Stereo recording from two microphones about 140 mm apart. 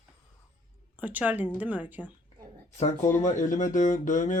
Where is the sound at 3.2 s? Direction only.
60° left (ahead or behind).